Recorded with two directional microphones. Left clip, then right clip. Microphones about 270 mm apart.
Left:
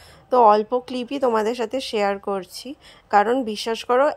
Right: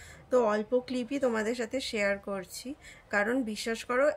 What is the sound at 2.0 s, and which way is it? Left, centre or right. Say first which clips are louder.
Speech: left 8 dB; left.